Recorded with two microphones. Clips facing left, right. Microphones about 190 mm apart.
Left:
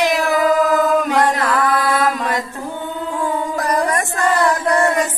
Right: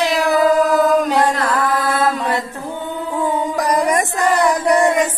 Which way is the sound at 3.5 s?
15° right (ahead or behind).